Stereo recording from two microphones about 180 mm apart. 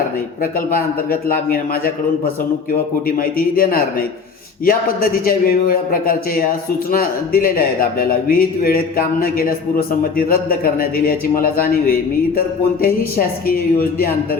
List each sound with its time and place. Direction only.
0.7 s a man's voice: 50° left (ahead or behind)
3.1 s a man's voice: 55° left (ahead or behind)